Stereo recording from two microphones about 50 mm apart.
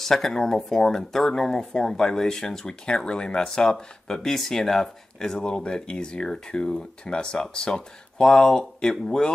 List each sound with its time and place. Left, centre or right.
0.0 s speech: centre